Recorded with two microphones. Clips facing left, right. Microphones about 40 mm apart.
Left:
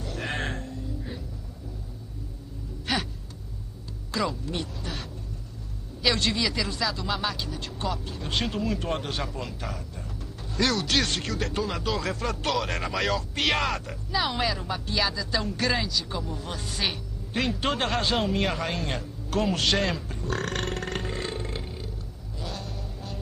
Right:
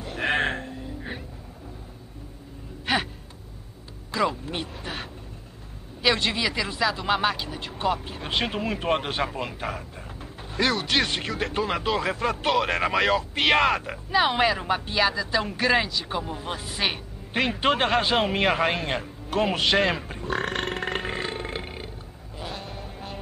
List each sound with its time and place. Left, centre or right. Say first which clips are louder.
0.0 s a sound: right 7 dB; right
2.9 s gasp: right 4 dB; right
4.2 s speech: right 3 dB; right
6.0 s a man's voice: right 2 dB; centre; by 9.8 s right
10.6 s speech: right 2 dB; right
16.1 s a man's voice: right 3 dB; right
16.5 s speech: right 2 dB; right
16.9 s music: right 2 dB; right
17.6 s a man's voice: right 5 dB; right
19.5 s speech: right 5 dB; right
20.0 s burping: right 3 dB; right
22.4 s music: right 1 dB; right